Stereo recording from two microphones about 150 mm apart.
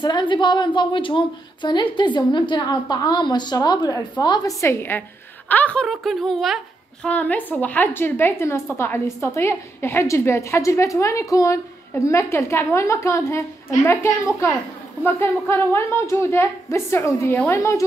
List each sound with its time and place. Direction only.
0.0 s a woman's voice: 30° left (ahead or behind)